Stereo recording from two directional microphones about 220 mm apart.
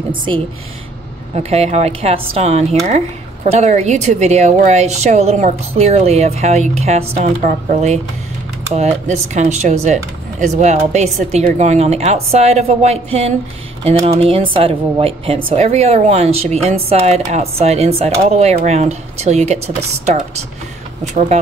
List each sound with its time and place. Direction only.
1.3 s a woman's voice: 30° right (ahead or behind)